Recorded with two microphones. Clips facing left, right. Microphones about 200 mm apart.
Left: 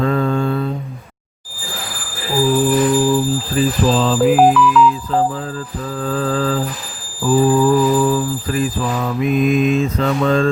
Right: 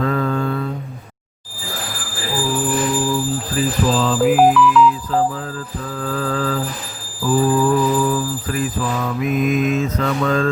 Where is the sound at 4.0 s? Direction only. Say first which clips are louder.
Left 1 dB; 30° left (ahead or behind).